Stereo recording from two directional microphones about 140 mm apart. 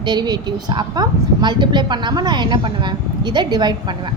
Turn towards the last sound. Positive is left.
turn(degrees=-30)  # may be behind; listen again after turning